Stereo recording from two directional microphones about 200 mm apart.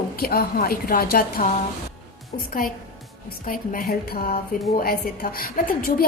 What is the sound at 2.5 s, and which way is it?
Speech, 45° left (ahead or behind).